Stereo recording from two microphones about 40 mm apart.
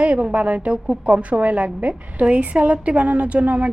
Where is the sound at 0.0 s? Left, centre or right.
Right.